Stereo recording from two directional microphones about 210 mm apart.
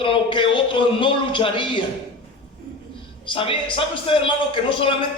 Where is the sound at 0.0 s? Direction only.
25° left (ahead or behind).